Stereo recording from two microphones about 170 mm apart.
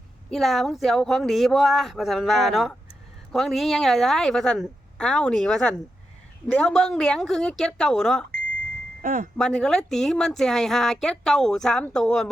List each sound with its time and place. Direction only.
0.3 s speech: centre (ahead or behind)
9.0 s speech: 50° right (ahead or behind)
9.4 s speech: 5° left (ahead or behind)